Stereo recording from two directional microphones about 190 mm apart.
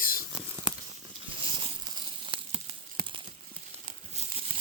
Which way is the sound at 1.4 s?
25° right (ahead or behind).